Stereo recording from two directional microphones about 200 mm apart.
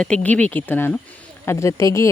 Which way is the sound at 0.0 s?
5° left (ahead or behind).